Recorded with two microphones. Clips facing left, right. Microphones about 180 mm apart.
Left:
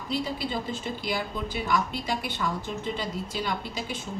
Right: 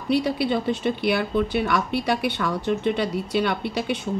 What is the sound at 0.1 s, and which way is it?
Speech, 70° right (ahead or behind).